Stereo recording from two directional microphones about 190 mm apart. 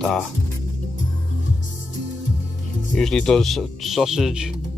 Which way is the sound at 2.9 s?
5° left (ahead or behind).